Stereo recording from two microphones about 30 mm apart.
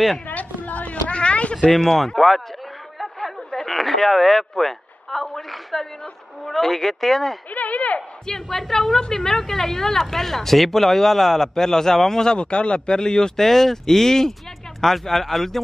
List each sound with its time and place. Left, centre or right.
0.6 s a sound: left
1.1 s a sound: left
1.9 s speech: centre
3.6 s speech: centre
7.5 s speech: left
8.3 s speech: centre
12.4 s speech: left
13.4 s speech: centre